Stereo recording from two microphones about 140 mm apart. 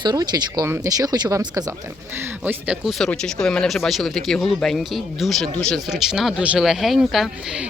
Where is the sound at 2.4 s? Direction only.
10° right (ahead or behind).